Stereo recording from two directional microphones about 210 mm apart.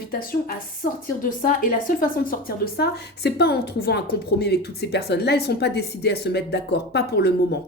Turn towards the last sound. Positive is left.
turn(degrees=50)  # may be behind; listen again after turning